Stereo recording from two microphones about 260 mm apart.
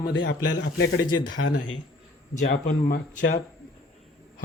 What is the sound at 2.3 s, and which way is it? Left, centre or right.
Speech, left.